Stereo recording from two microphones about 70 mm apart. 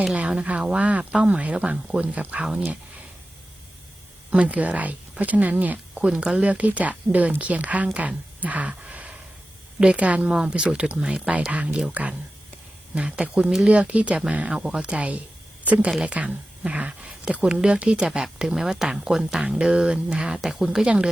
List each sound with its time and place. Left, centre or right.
0.2 s speech: centre
4.3 s a woman's voice: centre